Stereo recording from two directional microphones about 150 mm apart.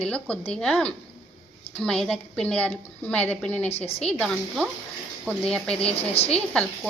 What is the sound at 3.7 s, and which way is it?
Speech, 45° left (ahead or behind).